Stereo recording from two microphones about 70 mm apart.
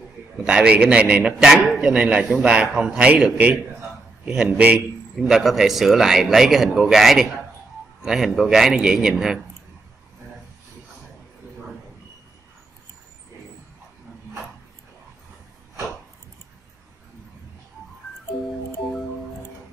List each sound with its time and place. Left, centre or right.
0.4 s a man's voice: centre
5.2 s a man's voice: centre